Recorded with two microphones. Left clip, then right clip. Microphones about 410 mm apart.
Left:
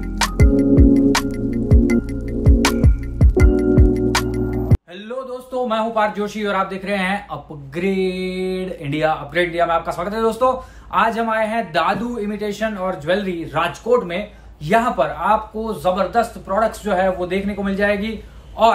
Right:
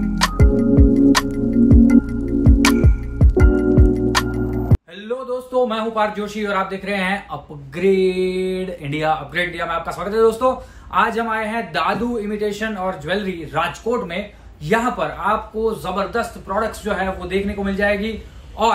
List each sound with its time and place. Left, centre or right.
0.0 s music: centre
5.5 s speech: centre